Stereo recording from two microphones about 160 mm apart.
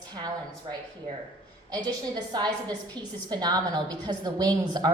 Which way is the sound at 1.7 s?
25° right (ahead or behind).